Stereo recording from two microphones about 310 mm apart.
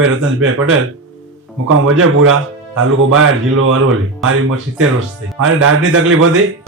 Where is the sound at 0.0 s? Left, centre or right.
Right.